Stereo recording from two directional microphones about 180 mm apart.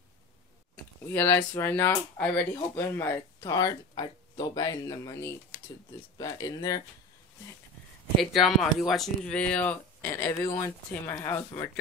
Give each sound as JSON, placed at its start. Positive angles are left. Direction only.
{"t": 1.1, "sound": "speech", "side_deg": 10}
{"t": 8.2, "sound": "speech", "side_deg": 0}